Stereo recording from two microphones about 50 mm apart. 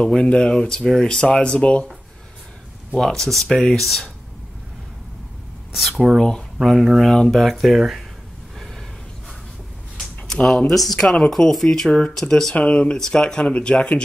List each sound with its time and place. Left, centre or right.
0.0 s speech: centre
3.0 s speech: centre
5.7 s speech: centre
9.9 s a sound: centre
10.7 s speech: centre
12.5 s speech: left
13.5 s speech: left